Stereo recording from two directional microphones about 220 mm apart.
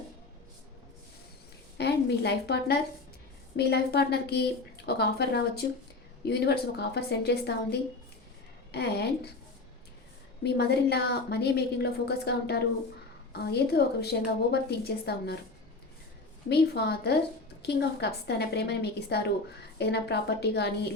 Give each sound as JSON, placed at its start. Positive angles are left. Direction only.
{"t": 1.8, "sound": "a woman's voice", "side_deg": 50}
{"t": 10.4, "sound": "a woman's voice", "side_deg": 50}
{"t": 16.5, "sound": "a woman's voice", "side_deg": 45}